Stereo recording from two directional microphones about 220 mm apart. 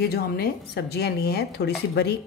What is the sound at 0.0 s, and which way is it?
Speech, 45° left (ahead or behind).